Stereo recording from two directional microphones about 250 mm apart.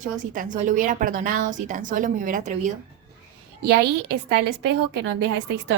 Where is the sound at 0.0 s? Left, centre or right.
Right.